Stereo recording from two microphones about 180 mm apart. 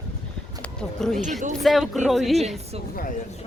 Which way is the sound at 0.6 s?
5° left (ahead or behind).